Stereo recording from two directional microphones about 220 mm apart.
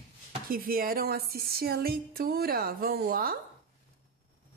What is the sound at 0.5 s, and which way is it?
A woman's voice, 40° right (ahead or behind).